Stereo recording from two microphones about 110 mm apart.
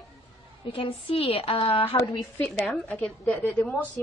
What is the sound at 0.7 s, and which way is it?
A woman's voice, 55° left (ahead or behind).